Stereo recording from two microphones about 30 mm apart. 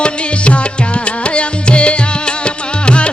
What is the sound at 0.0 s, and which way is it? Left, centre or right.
Music, left.